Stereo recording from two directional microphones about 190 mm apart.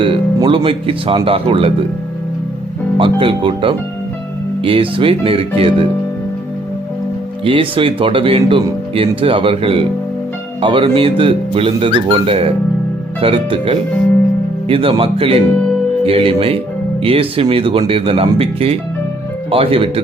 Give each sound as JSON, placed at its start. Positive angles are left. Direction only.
{"t": 0.0, "sound": "speech", "side_deg": -25}
{"t": 3.0, "sound": "speech", "side_deg": -30}
{"t": 7.4, "sound": "speech", "side_deg": -30}